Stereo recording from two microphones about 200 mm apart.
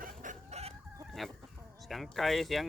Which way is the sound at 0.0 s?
40° right (ahead or behind).